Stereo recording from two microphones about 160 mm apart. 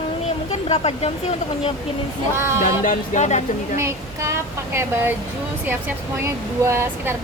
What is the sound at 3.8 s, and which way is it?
Speech, 15° right (ahead or behind).